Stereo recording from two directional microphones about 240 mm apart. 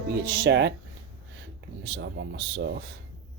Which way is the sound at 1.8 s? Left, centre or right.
Right.